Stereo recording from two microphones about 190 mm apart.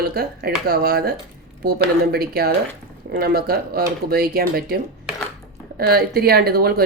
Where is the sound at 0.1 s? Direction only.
55° right (ahead or behind).